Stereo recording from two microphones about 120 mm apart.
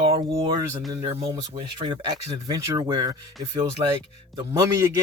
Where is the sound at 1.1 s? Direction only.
50° right (ahead or behind).